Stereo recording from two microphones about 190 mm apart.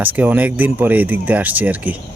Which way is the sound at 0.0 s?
10° right (ahead or behind).